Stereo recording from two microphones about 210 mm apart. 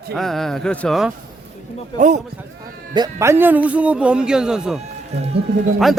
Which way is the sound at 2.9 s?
15° right (ahead or behind).